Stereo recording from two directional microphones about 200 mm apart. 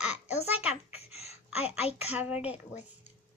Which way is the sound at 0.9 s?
30° left (ahead or behind).